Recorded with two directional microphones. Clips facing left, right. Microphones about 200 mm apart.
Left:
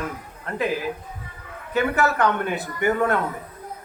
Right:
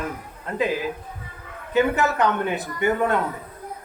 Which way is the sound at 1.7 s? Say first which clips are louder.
Right 1 dB; 20° right (ahead or behind).